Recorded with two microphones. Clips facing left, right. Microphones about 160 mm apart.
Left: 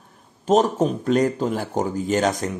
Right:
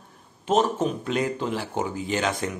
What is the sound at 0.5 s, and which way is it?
Speech, 40° left (ahead or behind).